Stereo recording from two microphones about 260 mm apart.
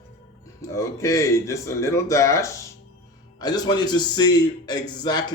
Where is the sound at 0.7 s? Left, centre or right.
Centre.